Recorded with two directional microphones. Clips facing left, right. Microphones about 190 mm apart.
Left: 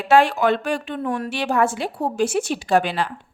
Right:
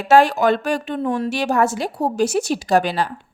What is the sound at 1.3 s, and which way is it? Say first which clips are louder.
A woman's voice: even; 40° right (ahead or behind).